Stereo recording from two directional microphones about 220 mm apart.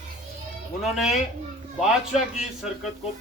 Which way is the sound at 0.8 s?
Centre (ahead or behind).